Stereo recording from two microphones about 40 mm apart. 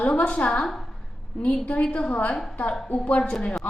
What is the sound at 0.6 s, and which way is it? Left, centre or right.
A woman's voice, centre.